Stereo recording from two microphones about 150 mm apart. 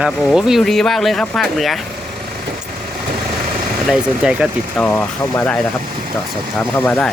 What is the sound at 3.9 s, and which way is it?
Speech, 5° right (ahead or behind).